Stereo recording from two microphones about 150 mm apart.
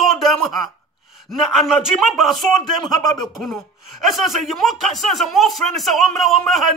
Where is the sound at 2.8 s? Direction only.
25° left (ahead or behind).